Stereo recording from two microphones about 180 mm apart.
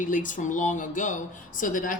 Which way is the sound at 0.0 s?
45° left (ahead or behind).